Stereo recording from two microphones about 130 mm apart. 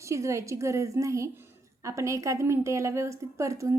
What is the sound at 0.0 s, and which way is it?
A woman's voice, 25° right (ahead or behind).